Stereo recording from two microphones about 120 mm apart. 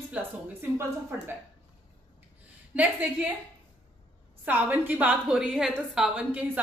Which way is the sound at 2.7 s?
10° right (ahead or behind).